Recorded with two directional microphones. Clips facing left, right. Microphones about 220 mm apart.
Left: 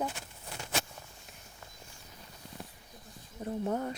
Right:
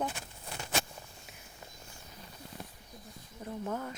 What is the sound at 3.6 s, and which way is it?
Speech, 30° left (ahead or behind).